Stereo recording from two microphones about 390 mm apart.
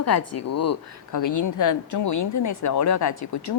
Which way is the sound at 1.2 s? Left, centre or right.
Left.